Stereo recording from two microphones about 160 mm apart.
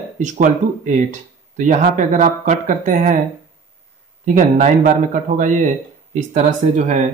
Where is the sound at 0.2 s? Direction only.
50° right (ahead or behind).